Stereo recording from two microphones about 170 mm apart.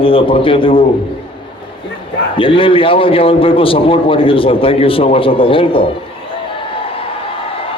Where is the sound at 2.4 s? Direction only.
30° left (ahead or behind).